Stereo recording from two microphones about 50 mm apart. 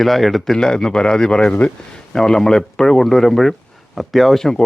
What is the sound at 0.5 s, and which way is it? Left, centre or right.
Speech, centre.